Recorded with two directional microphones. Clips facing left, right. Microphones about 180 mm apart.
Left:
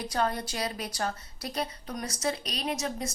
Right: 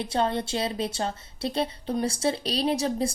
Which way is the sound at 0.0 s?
25° right (ahead or behind).